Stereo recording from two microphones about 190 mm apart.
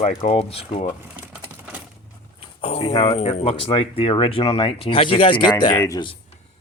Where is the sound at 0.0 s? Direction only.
35° left (ahead or behind).